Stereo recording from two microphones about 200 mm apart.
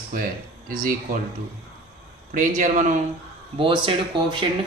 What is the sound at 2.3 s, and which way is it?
Speech, 40° right (ahead or behind).